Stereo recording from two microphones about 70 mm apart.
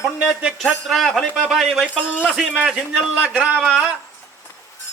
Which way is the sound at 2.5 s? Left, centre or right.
Centre.